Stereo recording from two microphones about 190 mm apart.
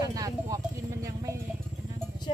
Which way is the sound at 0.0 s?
20° right (ahead or behind).